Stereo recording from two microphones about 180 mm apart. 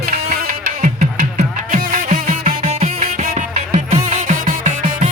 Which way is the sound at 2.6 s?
35° right (ahead or behind).